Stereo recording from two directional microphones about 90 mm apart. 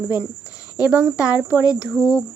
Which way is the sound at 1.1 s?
35° left (ahead or behind).